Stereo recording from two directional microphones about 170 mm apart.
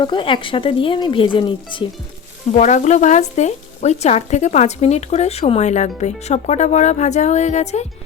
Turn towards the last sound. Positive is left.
turn(degrees=40)  # may be behind; listen again after turning